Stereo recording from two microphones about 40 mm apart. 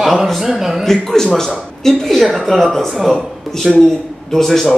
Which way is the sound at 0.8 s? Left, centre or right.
Centre.